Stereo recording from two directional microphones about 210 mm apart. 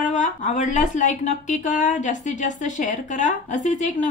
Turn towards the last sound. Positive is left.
turn(degrees=35)  # may be behind; listen again after turning